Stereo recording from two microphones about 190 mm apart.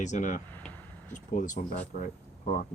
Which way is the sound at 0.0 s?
40° left (ahead or behind).